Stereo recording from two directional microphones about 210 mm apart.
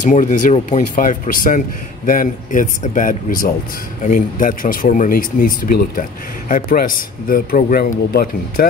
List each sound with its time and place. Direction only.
0.0 s speech: 35° left (ahead or behind)